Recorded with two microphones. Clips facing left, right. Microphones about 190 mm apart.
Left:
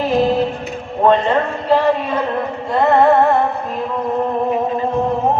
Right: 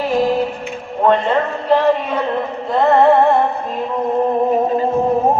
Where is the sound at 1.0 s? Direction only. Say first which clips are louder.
Left 1 dB; 10° left (ahead or behind).